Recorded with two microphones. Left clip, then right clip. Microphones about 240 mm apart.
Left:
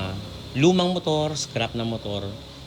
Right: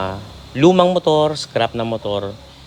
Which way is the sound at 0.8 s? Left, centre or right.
Right.